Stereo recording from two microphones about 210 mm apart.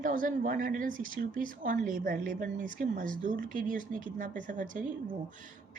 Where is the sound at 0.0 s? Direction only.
40° right (ahead or behind).